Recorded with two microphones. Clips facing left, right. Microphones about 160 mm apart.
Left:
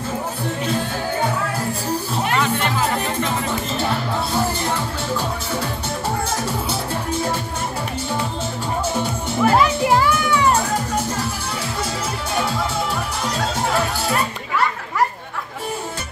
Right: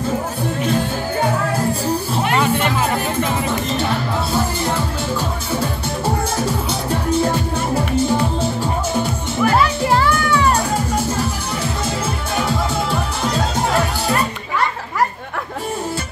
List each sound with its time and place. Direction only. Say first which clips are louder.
9.4 s music: even; 25° left (ahead or behind)
9.8 s music: right 1 dB; 15° left (ahead or behind)